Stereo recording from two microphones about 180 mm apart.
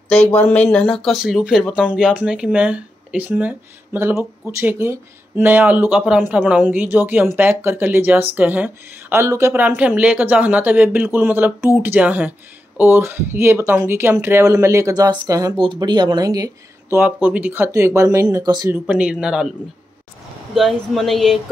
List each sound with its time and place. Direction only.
0.1 s speech: 5° left (ahead or behind); by 16.4 s 20° right (ahead or behind)
16.9 s speech: 10° right (ahead or behind)
18.9 s speech: 5° right (ahead or behind)
20.5 s speech: centre (ahead or behind)